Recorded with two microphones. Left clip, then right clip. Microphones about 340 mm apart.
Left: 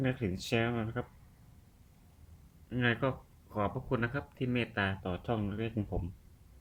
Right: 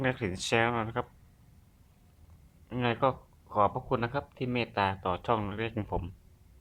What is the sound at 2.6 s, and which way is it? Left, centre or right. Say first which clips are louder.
Speech: right 4 dB; centre.